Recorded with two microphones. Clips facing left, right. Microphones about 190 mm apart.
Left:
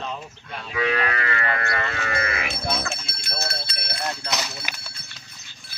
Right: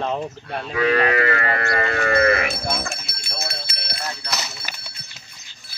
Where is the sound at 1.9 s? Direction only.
50° right (ahead or behind).